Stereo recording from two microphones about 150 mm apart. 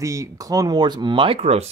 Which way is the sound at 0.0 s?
20° right (ahead or behind).